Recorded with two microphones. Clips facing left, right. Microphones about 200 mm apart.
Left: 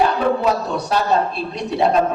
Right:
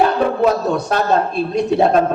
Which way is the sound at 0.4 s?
50° right (ahead or behind).